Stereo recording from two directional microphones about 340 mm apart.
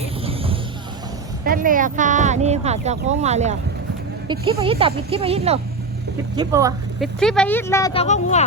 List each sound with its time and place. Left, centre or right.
0.2 s music: centre
1.5 s speech: right
7.2 s speech: centre